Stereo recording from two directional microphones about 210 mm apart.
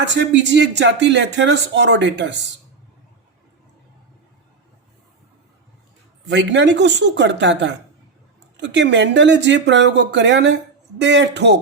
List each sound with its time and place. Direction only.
0.0 s speech: 55° right (ahead or behind)
6.2 s speech: 60° right (ahead or behind)